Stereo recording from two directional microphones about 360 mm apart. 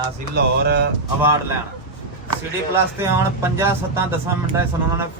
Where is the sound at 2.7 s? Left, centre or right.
Centre.